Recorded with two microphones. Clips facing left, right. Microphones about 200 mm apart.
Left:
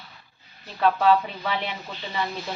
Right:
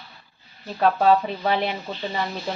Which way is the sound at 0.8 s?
40° right (ahead or behind).